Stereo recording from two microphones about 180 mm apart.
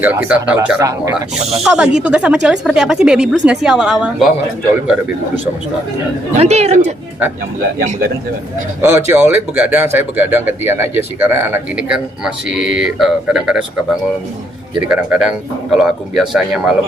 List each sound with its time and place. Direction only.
0.0 s speech: 10° right (ahead or behind)
1.4 s speech: 35° right (ahead or behind)
1.6 s a woman's voice: 5° right (ahead or behind)
6.4 s a man's voice: 35° right (ahead or behind)
8.8 s a woman's voice: 15° right (ahead or behind)